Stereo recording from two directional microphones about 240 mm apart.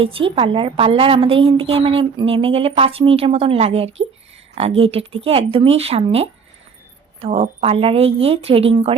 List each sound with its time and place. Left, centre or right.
0.0 s a woman's voice: right